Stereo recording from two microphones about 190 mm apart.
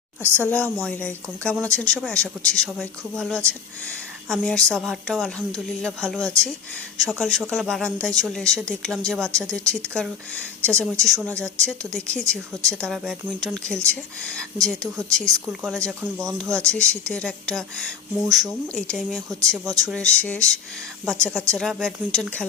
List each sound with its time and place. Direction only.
0.2 s a woman's voice: 10° right (ahead or behind)
0.4 s a woman's voice: 5° left (ahead or behind)
19.6 s speech: 20° right (ahead or behind)
19.9 s speech: 5° left (ahead or behind)